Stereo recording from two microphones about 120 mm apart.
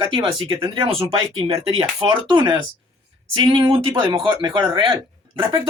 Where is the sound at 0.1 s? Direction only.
45° right (ahead or behind).